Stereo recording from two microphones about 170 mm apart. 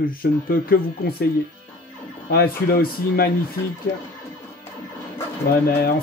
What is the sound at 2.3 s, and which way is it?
Speech, 65° left (ahead or behind).